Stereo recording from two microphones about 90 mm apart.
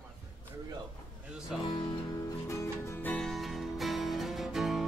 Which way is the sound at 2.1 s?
35° left (ahead or behind).